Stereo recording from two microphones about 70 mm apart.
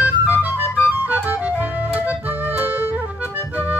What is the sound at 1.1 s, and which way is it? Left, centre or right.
Music, right.